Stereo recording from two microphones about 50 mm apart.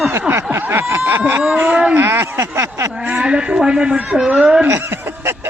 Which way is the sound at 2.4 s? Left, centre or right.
Right.